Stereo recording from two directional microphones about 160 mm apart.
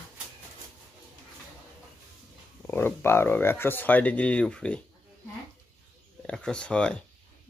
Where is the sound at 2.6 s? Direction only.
15° left (ahead or behind).